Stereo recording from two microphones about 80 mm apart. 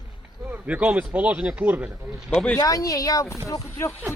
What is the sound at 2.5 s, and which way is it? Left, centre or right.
Speech, left.